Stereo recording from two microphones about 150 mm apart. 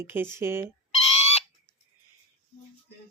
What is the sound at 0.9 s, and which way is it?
Chicken, 45° left (ahead or behind).